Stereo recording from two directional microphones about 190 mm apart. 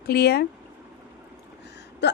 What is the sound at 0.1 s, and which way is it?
Speech, 60° left (ahead or behind).